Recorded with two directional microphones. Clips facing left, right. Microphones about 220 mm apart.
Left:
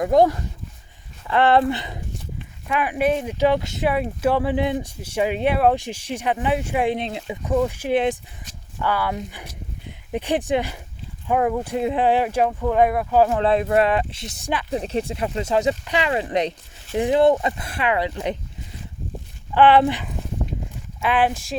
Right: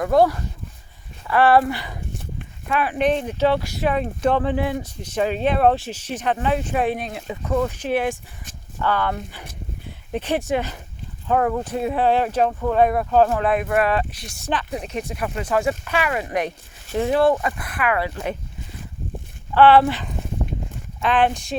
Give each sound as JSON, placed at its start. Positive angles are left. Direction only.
{"t": 0.0, "sound": "speech", "side_deg": 20}
{"t": 3.8, "sound": "speech", "side_deg": 10}
{"t": 13.3, "sound": "speech", "side_deg": 25}
{"t": 14.7, "sound": "speech", "side_deg": 30}
{"t": 19.5, "sound": "speech", "side_deg": 15}